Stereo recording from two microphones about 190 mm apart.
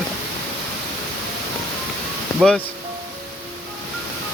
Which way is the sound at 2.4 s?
5° left (ahead or behind).